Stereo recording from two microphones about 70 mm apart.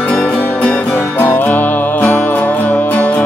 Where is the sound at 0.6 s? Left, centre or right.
Centre.